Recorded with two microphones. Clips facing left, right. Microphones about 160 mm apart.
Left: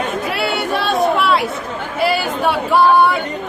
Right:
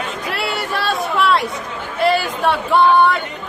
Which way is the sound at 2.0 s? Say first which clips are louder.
Right 1 dB; 5° left (ahead or behind).